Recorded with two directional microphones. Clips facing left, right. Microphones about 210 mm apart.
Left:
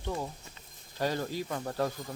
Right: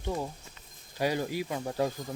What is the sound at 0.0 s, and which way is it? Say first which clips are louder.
Speech: right 2 dB; 15° right (ahead or behind).